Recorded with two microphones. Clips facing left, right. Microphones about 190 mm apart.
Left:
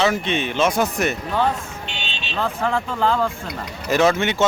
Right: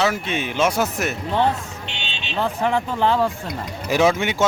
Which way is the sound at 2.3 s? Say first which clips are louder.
Right 1 dB; 20° right (ahead or behind).